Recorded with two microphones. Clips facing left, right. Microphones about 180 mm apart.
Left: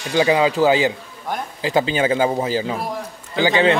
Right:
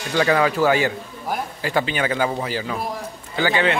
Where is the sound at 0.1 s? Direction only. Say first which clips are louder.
Left 2 dB; 15° left (ahead or behind).